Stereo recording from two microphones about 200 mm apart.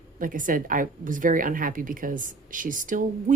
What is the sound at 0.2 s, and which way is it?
A woman's voice, 40° right (ahead or behind).